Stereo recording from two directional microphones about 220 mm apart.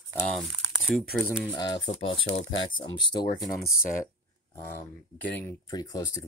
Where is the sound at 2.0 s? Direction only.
60° left (ahead or behind).